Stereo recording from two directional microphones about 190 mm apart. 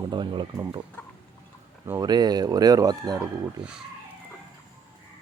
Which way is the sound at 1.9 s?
20° right (ahead or behind).